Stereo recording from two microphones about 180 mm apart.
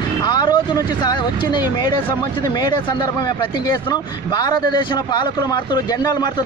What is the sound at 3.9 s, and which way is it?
Speech, 25° left (ahead or behind).